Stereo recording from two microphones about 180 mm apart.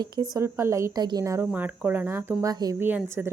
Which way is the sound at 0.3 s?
15° right (ahead or behind).